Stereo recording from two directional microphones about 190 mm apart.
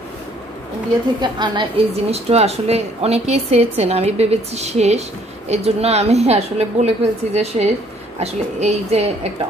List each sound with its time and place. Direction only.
1.2 s a woman's voice: 25° right (ahead or behind)